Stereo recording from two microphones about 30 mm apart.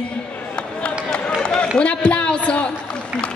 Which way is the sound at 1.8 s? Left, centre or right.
Left.